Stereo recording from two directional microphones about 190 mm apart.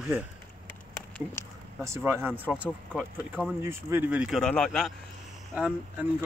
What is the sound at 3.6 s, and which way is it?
Speech, 10° right (ahead or behind).